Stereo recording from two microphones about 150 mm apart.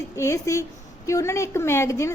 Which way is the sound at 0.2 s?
20° left (ahead or behind).